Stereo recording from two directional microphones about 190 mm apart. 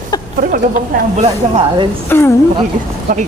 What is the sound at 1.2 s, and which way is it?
Speech, 25° right (ahead or behind).